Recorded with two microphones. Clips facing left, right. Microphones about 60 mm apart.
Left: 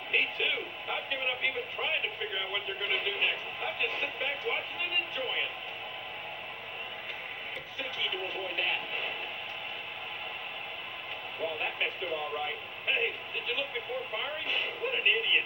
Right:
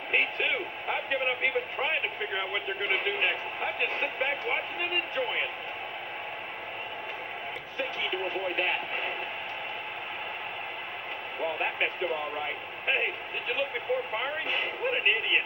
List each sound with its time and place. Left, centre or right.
0.1 s a sound: right
8.0 s speech: right
11.4 s speech: right